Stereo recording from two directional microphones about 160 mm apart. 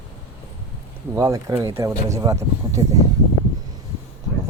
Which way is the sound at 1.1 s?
20° right (ahead or behind).